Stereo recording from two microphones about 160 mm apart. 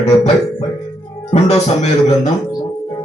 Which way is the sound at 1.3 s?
40° left (ahead or behind).